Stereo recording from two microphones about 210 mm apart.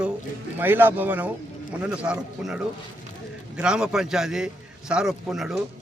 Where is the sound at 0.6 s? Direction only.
10° right (ahead or behind).